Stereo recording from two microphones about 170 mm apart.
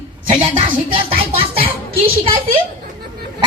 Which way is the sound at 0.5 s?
35° right (ahead or behind).